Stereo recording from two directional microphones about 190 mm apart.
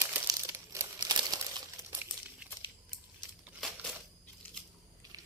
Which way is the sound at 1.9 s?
10° right (ahead or behind).